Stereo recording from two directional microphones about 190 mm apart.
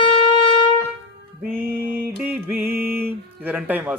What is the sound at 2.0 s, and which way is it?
Music, 10° right (ahead or behind).